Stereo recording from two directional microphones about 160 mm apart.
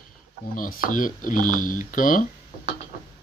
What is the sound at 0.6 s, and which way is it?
Speech, 60° left (ahead or behind).